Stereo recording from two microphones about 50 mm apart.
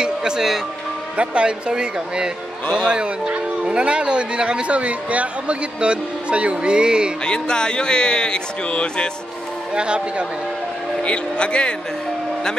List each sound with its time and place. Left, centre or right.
0.0 s music: centre
1.1 s speech: right
7.2 s music: centre
9.8 s speech: centre
11.0 s speech: left